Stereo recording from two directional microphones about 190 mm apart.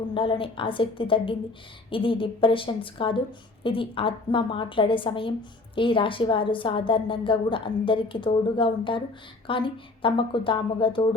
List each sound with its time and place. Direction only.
0.1 s a woman's voice: 25° left (ahead or behind)